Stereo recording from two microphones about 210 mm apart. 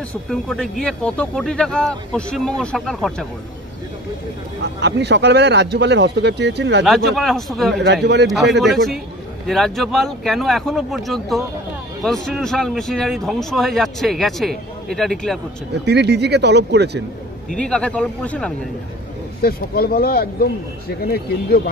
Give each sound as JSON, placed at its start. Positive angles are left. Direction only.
{"t": 0.1, "sound": "speech", "side_deg": 0}
{"t": 4.6, "sound": "speech", "side_deg": -55}
{"t": 6.8, "sound": "speech", "side_deg": 0}
{"t": 7.8, "sound": "speech", "side_deg": -55}
{"t": 8.5, "sound": "speech", "side_deg": 0}
{"t": 15.8, "sound": "speech", "side_deg": -55}
{"t": 17.6, "sound": "speech", "side_deg": 5}
{"t": 19.4, "sound": "speech", "side_deg": 45}